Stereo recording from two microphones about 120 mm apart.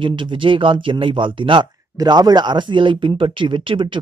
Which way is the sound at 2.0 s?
35° right (ahead or behind).